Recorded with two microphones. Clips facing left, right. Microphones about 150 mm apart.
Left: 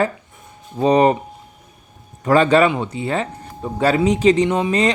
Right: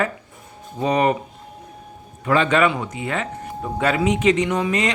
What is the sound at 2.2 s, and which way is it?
Speech, 40° left (ahead or behind).